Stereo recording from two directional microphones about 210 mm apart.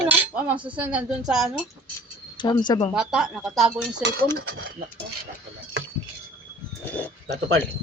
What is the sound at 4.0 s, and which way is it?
Dishes, 55° right (ahead or behind).